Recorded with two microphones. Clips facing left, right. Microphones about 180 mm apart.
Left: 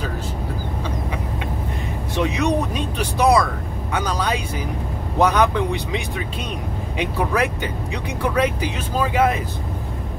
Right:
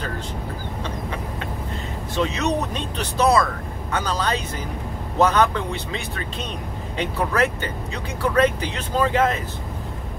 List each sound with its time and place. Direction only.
2.1 s speech: 15° left (ahead or behind)